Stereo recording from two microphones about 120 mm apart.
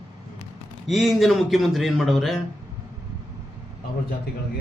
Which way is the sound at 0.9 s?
Centre (ahead or behind).